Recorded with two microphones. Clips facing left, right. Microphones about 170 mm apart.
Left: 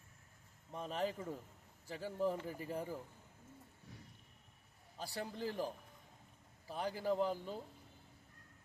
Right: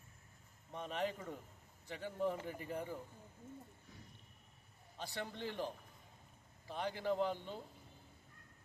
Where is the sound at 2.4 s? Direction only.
35° left (ahead or behind).